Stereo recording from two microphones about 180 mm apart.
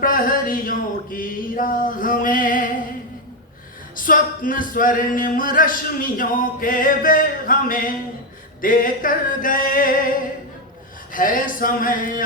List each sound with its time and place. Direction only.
0.0 s a sound: 50° left (ahead or behind)
3.9 s male singing: 50° left (ahead or behind)
11.1 s male singing: 50° left (ahead or behind)